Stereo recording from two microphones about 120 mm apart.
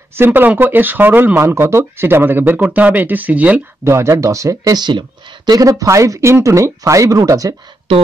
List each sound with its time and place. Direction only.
0.2 s speech: 15° right (ahead or behind)
3.8 s speech: 20° right (ahead or behind)
7.9 s speech: 50° right (ahead or behind)